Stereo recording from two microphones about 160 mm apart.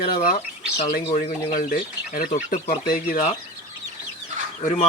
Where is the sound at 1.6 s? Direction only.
65° left (ahead or behind).